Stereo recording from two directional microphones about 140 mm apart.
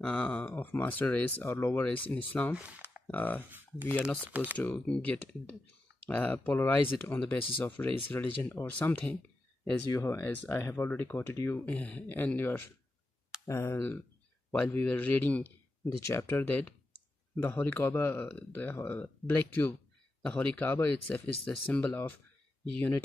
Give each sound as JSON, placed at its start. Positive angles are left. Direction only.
{"t": 0.0, "sound": "speech", "side_deg": 10}
{"t": 2.5, "sound": "speech", "side_deg": -10}
{"t": 3.1, "sound": "speech", "side_deg": 10}
{"t": 3.4, "sound": "speech", "side_deg": -15}
{"t": 4.6, "sound": "speech", "side_deg": 10}
{"t": 9.9, "sound": "speech", "side_deg": 20}
{"t": 20.2, "sound": "speech", "side_deg": 10}